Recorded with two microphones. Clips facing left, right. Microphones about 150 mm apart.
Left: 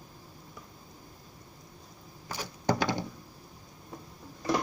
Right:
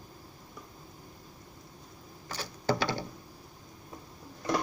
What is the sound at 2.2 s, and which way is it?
Typing, 10° left (ahead or behind).